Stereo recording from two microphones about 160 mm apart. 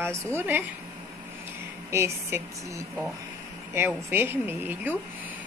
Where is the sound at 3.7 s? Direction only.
15° right (ahead or behind).